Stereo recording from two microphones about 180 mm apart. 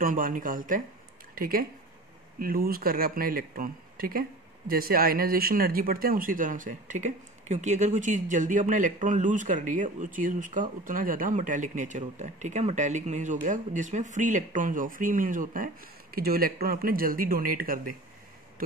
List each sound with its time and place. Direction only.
0.0 s speech: 50° right (ahead or behind)